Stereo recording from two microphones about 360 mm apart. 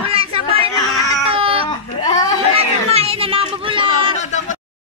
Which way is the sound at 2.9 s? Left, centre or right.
Centre.